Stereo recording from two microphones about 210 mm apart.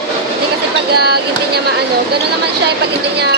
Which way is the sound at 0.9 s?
50° right (ahead or behind).